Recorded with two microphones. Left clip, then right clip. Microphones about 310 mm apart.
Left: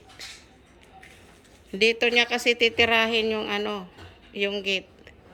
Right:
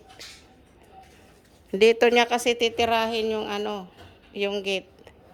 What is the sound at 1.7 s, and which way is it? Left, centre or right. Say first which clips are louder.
A woman's voice: right 3 dB; centre.